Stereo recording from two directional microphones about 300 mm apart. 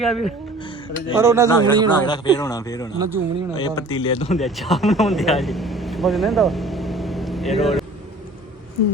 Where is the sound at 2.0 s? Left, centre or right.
Centre.